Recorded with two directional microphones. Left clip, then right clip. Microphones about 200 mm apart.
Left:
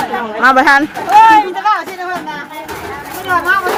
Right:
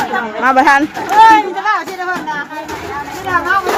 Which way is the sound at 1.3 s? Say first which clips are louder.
Left 1 dB; 35° left (ahead or behind).